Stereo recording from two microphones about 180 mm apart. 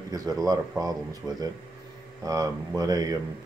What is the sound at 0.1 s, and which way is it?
Speech, 20° right (ahead or behind).